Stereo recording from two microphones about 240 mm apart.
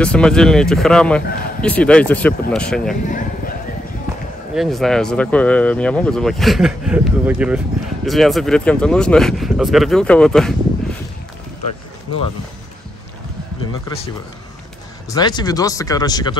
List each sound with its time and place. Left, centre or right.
0.0 s speech: centre
4.6 s speech: centre
15.0 s speech: centre